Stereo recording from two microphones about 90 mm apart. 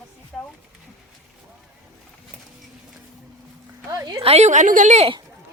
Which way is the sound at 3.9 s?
40° right (ahead or behind).